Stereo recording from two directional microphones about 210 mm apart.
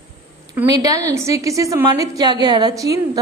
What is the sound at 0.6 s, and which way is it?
A woman's voice, 15° right (ahead or behind).